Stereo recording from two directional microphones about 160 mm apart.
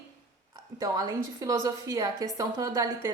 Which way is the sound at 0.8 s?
20° right (ahead or behind).